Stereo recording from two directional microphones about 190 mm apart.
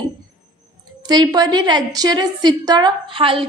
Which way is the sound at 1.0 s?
20° right (ahead or behind).